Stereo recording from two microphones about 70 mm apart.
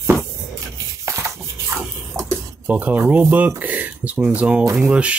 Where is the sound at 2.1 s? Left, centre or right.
Right.